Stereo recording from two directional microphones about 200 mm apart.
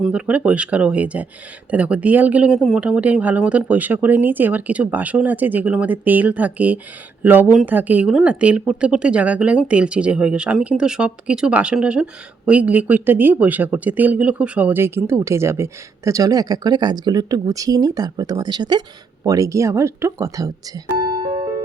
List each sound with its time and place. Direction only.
0.0 s speech: 5° right (ahead or behind)